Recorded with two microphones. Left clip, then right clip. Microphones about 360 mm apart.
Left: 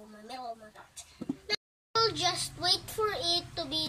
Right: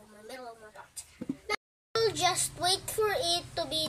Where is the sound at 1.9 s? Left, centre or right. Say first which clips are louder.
Right 1 dB; centre.